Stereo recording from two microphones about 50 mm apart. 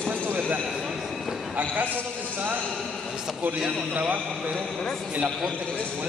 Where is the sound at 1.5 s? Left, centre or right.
Right.